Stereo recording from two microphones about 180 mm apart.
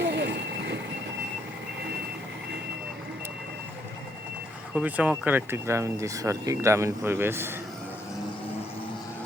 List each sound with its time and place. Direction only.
0.0 s reversing beeps: 70° right (ahead or behind)
4.7 s speech: 10° right (ahead or behind)